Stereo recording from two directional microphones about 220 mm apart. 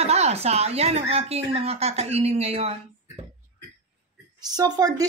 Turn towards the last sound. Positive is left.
turn(degrees=-15)  # may be behind; listen again after turning